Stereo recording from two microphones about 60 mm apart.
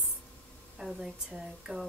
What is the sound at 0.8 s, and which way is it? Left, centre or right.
A woman's voice, centre.